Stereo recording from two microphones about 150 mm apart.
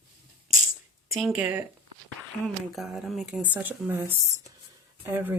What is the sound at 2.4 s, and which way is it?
Speech, centre (ahead or behind).